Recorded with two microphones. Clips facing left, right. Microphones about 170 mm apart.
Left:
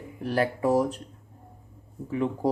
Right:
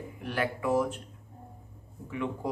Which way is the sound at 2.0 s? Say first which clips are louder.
Left 6 dB; 35° left (ahead or behind).